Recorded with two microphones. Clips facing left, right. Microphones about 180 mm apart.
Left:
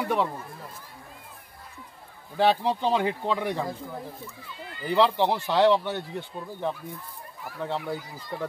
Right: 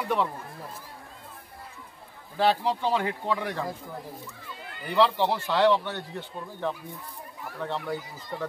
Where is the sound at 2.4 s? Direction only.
15° left (ahead or behind).